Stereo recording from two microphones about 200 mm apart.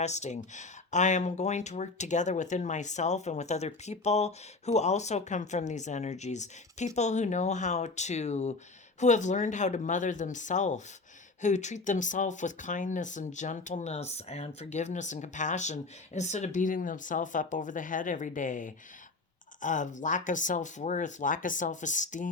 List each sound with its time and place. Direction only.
0.0 s speech: 35° left (ahead or behind)